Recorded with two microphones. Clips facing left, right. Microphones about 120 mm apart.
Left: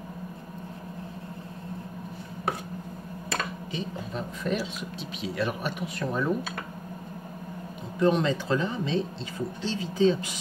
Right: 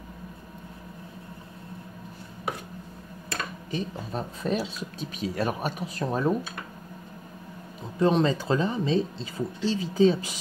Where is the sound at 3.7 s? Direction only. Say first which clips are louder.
Right 2 dB; 35° right (ahead or behind).